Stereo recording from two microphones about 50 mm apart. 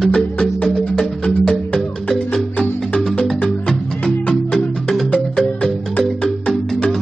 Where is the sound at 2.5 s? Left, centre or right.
Left.